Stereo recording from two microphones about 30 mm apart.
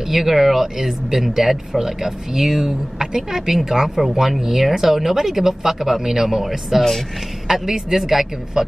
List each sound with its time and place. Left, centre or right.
0.1 s speech: centre
4.0 s speech: centre